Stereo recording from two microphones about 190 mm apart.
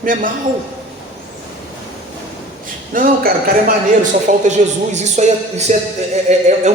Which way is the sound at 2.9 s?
45° right (ahead or behind).